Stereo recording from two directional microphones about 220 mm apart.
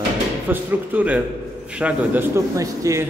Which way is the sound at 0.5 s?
5° right (ahead or behind).